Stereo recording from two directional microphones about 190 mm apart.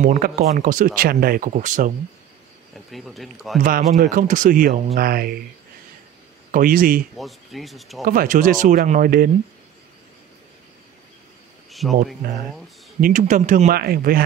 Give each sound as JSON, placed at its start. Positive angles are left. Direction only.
{"t": 0.0, "sound": "speech", "side_deg": -45}
{"t": 2.9, "sound": "speech", "side_deg": 0}
{"t": 4.0, "sound": "speech", "side_deg": -45}
{"t": 6.5, "sound": "speech", "side_deg": -50}
{"t": 7.2, "sound": "speech", "side_deg": 0}
{"t": 8.0, "sound": "speech", "side_deg": -50}
{"t": 11.7, "sound": "cricket", "side_deg": 0}
{"t": 13.0, "sound": "speech", "side_deg": -40}